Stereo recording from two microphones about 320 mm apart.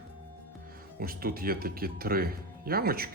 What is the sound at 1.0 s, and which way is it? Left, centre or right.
Speech, right.